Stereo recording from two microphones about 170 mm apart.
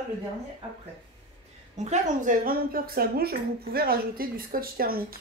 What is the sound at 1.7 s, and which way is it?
Speech, 45° right (ahead or behind).